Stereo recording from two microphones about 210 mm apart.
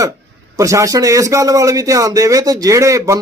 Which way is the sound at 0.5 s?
15° right (ahead or behind).